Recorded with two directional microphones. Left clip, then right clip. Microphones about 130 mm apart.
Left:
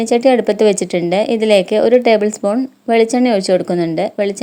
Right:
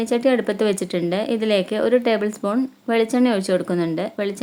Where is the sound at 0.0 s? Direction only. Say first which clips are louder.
Left 7 dB; 30° left (ahead or behind).